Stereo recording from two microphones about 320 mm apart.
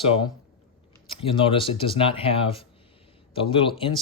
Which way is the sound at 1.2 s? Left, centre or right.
Centre.